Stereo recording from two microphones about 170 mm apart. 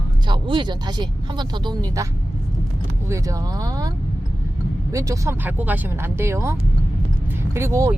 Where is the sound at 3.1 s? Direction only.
20° right (ahead or behind).